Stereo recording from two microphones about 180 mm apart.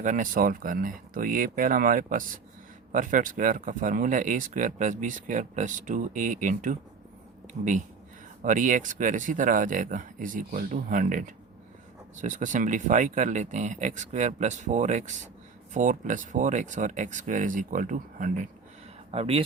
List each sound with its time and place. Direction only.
0.0 s speech: 45° right (ahead or behind)
7.4 s a sound: 45° right (ahead or behind)
8.4 s speech: 45° right (ahead or behind)
19.1 s speech: 35° right (ahead or behind)